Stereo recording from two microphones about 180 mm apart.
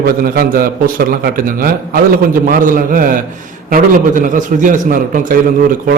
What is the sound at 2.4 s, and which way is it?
Speech, 50° right (ahead or behind).